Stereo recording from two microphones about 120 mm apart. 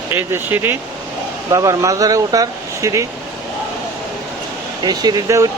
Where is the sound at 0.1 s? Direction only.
20° right (ahead or behind).